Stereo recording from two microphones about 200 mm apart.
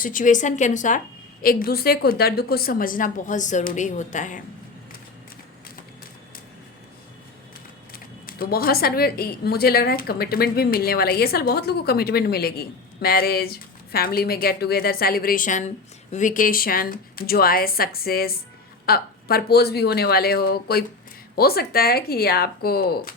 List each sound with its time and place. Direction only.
0.0 s a woman's voice: 40° left (ahead or behind)
7.9 s a woman's voice: 50° left (ahead or behind)